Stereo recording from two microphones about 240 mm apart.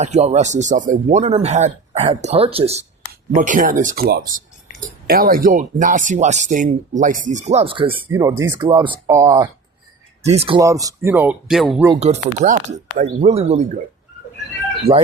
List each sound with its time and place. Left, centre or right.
0.0 s speech: right
7.9 s speech: centre
10.2 s speech: right; by 11.9 s centre
11.9 s speech: right
14.9 s speech: right